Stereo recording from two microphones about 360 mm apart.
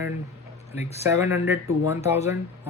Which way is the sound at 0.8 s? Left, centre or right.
Centre.